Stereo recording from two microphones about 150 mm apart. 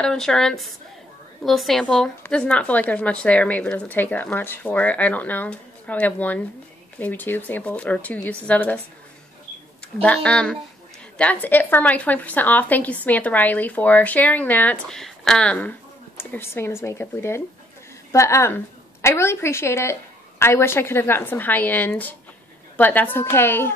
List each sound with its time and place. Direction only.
0.0 s a woman's voice: 5° left (ahead or behind)
10.0 s a woman's voice: 5° left (ahead or behind)